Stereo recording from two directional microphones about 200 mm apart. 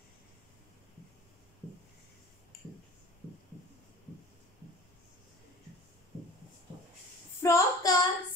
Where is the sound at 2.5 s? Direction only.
45° left (ahead or behind).